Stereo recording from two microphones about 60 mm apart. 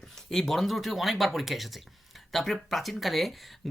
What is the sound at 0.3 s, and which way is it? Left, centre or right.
Speech, centre.